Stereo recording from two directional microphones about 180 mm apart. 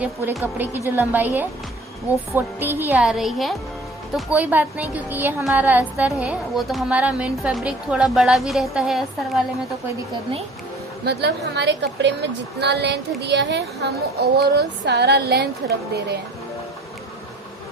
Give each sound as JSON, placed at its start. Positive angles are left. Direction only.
{"t": 0.0, "sound": "a woman's voice", "side_deg": -10}
{"t": 11.0, "sound": "a child's voice", "side_deg": -65}